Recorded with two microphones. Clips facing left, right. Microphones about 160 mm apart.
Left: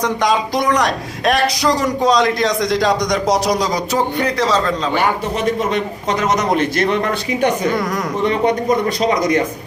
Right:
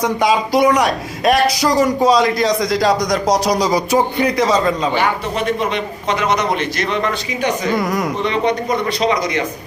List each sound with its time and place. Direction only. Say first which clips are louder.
0.0 s a man's voice: right 1 dB; 5° right (ahead or behind)
3.9 s a man's voice: right 1 dB; 10° right (ahead or behind)
5.5 s a man's voice: left 3 dB; 45° left (ahead or behind)
7.8 s a man's voice: right 2 dB; 10° right (ahead or behind)
8.2 s a man's voice: left 5 dB; 50° left (ahead or behind)